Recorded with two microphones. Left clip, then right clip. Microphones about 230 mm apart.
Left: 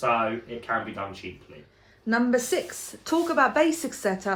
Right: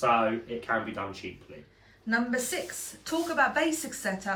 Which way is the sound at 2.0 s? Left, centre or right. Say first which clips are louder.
Left 5 dB; left.